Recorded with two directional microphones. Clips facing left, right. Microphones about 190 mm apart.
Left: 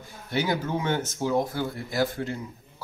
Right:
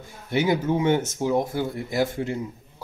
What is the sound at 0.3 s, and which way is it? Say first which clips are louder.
Speech: right 5 dB; 20° right (ahead or behind).